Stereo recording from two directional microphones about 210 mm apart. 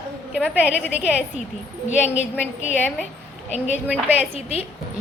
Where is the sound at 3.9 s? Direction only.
10° right (ahead or behind).